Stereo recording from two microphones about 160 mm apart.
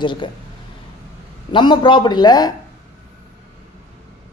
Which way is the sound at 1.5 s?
30° left (ahead or behind).